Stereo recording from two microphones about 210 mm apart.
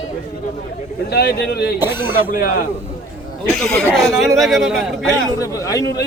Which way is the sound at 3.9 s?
Centre (ahead or behind).